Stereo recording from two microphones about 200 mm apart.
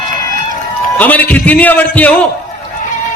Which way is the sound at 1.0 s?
10° left (ahead or behind).